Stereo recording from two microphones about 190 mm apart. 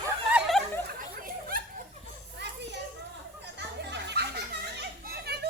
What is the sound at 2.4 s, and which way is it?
Children playing, 65° right (ahead or behind).